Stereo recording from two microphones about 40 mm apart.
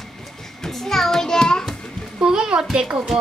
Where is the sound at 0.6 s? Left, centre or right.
Centre.